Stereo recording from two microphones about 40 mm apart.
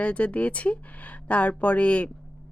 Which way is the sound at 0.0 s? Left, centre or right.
Left.